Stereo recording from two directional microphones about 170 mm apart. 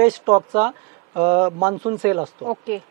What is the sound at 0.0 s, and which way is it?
Speech, 20° right (ahead or behind).